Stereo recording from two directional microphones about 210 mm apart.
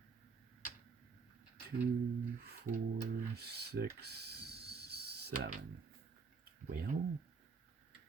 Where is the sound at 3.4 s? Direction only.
50° right (ahead or behind).